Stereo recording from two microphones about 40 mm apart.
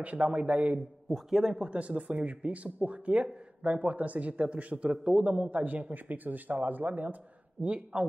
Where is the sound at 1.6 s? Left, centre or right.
Right.